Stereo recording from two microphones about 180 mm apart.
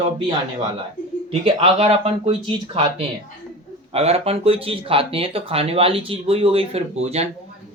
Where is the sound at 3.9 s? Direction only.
35° right (ahead or behind).